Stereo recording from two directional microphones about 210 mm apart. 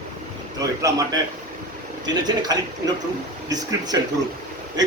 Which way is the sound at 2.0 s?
20° right (ahead or behind).